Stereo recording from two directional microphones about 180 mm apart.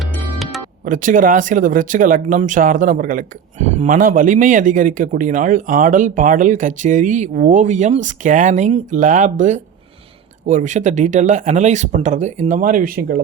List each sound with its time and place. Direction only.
0.9 s speech: 45° right (ahead or behind)